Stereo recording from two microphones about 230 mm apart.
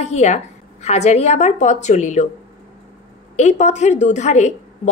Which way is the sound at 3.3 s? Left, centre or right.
Left.